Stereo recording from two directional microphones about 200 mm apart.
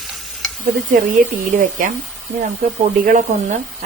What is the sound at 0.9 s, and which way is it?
Speech, 40° right (ahead or behind).